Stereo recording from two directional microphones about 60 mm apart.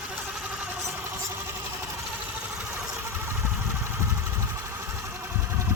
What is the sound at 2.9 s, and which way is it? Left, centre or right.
Vehicle, right.